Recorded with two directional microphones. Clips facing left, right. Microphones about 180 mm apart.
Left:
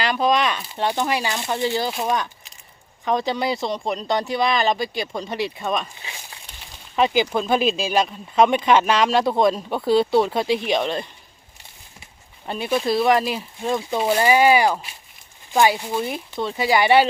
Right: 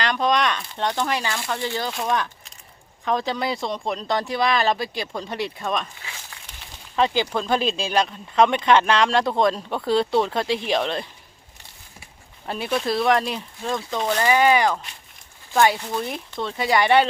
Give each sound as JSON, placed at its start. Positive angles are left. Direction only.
{"t": 0.0, "sound": "speech", "side_deg": 5}
{"t": 1.8, "sound": "speech", "side_deg": 10}
{"t": 6.0, "sound": "a sound", "side_deg": 20}
{"t": 6.9, "sound": "speech", "side_deg": 10}
{"t": 12.5, "sound": "speech", "side_deg": 0}
{"t": 13.6, "sound": "speech", "side_deg": 15}